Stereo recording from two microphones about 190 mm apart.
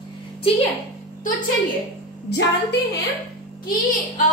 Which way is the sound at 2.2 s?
65° left (ahead or behind).